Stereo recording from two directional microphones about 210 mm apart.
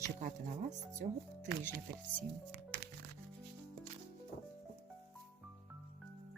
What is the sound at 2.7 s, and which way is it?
Music, 55° right (ahead or behind).